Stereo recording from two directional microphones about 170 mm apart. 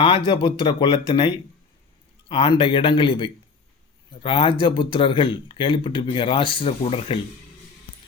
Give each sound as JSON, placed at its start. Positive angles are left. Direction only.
{"t": 0.3, "sound": "speech", "side_deg": 25}
{"t": 2.3, "sound": "speech", "side_deg": 30}